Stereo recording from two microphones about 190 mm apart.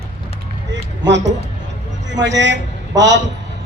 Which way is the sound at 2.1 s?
70° right (ahead or behind).